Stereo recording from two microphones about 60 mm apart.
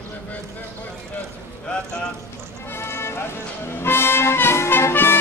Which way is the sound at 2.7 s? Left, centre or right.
Left.